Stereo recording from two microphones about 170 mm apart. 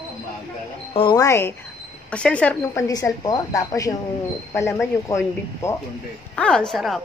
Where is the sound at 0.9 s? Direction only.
25° left (ahead or behind).